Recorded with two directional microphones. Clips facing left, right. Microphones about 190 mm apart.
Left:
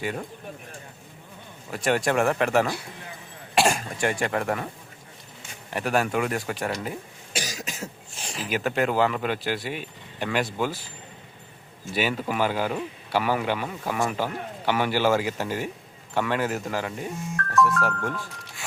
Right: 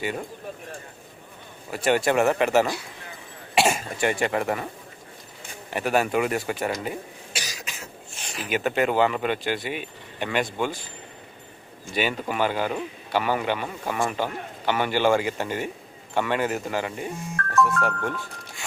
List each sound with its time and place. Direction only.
1.7 s speech: centre (ahead or behind)
5.7 s speech: centre (ahead or behind)
7.3 s cough: 45° left (ahead or behind)
8.4 s speech: centre (ahead or behind)
11.9 s speech: 5° left (ahead or behind)